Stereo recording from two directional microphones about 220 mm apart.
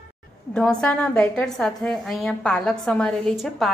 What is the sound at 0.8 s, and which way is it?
A woman's voice, 5° left (ahead or behind).